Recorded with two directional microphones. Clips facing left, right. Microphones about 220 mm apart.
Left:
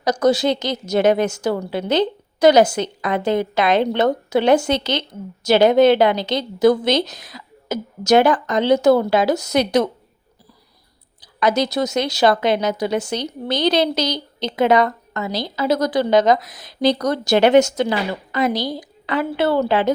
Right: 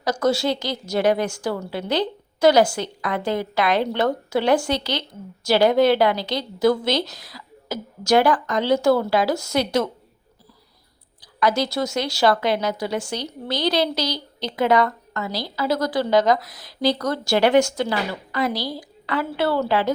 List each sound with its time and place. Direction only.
0.0 s a woman's voice: 20° left (ahead or behind)
11.2 s a woman's voice: 20° left (ahead or behind)